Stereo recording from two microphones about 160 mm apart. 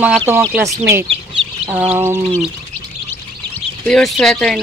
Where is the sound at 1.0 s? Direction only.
35° right (ahead or behind).